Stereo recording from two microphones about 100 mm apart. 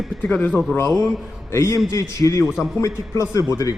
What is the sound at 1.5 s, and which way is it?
A man's voice, 30° left (ahead or behind).